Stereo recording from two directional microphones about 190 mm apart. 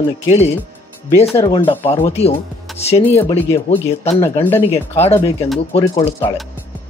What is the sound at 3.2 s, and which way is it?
Speech, 15° left (ahead or behind).